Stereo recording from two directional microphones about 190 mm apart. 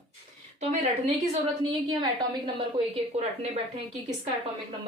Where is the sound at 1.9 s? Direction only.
25° right (ahead or behind).